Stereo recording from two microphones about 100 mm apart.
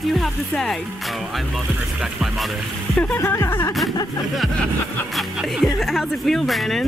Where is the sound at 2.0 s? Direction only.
5° right (ahead or behind).